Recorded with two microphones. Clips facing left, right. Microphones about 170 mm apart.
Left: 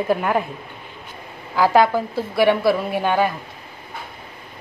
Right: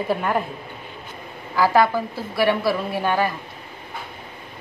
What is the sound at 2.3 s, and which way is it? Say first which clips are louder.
Speech: left 3 dB; 15° left (ahead or behind).